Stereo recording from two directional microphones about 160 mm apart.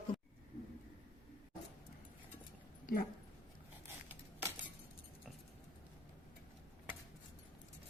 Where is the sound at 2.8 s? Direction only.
60° left (ahead or behind).